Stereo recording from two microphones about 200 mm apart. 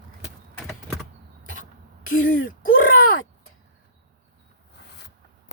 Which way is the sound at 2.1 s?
45° left (ahead or behind).